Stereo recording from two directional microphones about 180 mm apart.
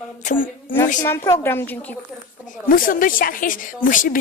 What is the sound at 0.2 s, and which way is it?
Speech, 45° left (ahead or behind).